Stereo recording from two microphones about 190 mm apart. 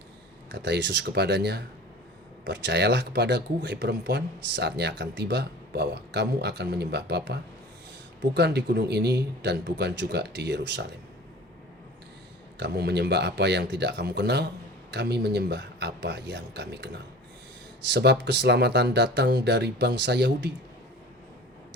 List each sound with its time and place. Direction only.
0.5 s speech: 60° right (ahead or behind)
12.5 s speech: 60° right (ahead or behind)